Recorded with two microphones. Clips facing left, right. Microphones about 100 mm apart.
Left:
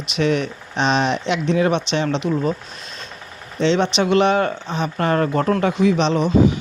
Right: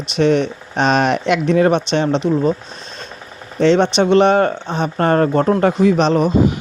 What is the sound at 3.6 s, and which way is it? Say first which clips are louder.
Speech: right 5 dB; 40° right (ahead or behind).